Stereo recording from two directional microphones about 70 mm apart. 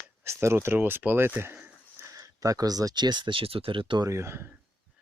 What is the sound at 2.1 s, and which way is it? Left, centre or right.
Speech, right.